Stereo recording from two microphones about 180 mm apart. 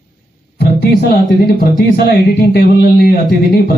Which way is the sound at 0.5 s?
60° left (ahead or behind).